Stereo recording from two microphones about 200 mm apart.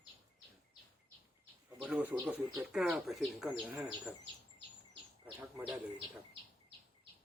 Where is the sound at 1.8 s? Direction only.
5° right (ahead or behind).